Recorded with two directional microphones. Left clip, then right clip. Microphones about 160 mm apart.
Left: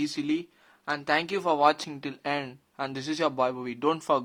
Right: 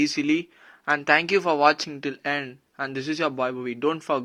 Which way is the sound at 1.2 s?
5° right (ahead or behind).